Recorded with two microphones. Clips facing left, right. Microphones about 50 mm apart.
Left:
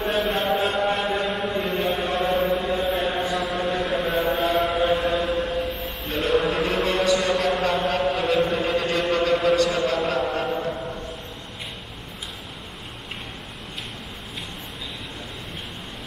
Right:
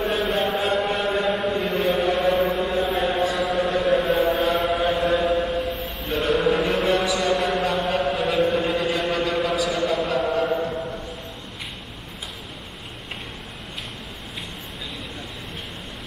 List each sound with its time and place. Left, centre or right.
0.0 s chant: centre